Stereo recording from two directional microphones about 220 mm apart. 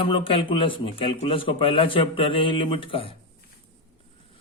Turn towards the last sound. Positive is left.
turn(degrees=25)  # may be behind; listen again after turning